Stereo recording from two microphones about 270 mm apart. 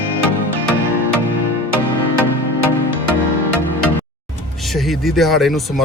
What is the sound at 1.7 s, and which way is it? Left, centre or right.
Music, left.